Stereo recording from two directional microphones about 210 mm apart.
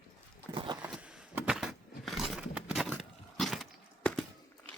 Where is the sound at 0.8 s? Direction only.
5° right (ahead or behind).